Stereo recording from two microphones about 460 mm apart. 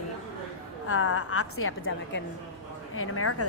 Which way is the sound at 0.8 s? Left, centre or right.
Left.